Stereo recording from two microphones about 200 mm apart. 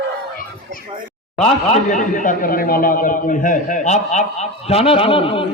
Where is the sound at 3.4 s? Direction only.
40° left (ahead or behind).